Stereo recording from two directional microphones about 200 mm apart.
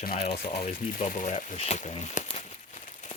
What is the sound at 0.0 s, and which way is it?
Speech, 45° left (ahead or behind).